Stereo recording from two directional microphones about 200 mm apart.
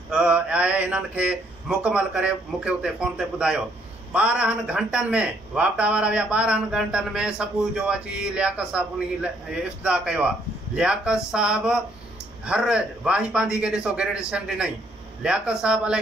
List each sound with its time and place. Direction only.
0.1 s speech: 5° right (ahead or behind)